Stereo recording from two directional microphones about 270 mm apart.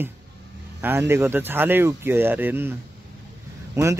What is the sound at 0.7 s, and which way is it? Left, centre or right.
Speech, centre.